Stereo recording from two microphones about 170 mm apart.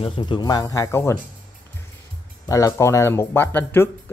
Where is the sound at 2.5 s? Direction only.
20° left (ahead or behind).